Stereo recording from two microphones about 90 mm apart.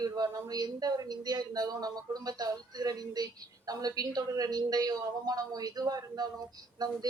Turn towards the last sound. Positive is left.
turn(degrees=-50)  # may be behind; listen again after turning